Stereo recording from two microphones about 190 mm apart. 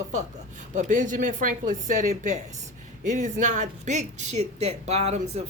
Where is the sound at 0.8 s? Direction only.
40° right (ahead or behind).